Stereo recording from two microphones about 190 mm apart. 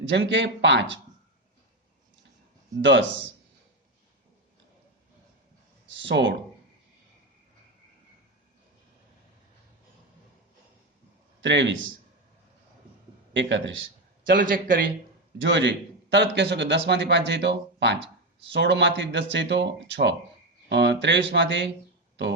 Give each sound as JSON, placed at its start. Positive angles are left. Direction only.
{"t": 0.1, "sound": "a man's voice", "side_deg": -70}
{"t": 2.8, "sound": "a man's voice", "side_deg": -70}
{"t": 5.9, "sound": "a man's voice", "side_deg": -75}
{"t": 11.3, "sound": "a man's voice", "side_deg": -70}
{"t": 13.3, "sound": "a man's voice", "side_deg": -75}
{"t": 14.3, "sound": "a man's voice", "side_deg": -45}
{"t": 15.4, "sound": "a man's voice", "side_deg": -70}